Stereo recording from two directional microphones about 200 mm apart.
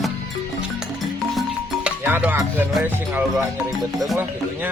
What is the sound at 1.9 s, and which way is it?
Music, 5° right (ahead or behind).